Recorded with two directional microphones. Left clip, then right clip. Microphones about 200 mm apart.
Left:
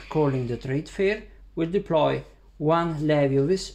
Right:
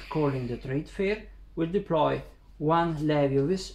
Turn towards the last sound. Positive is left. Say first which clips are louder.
# left 3 dB
turn(degrees=30)  # may be behind; listen again after turning